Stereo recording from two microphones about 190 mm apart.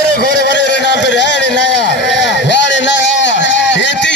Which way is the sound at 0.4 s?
65° left (ahead or behind).